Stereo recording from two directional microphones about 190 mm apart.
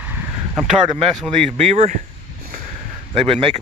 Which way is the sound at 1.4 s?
35° right (ahead or behind).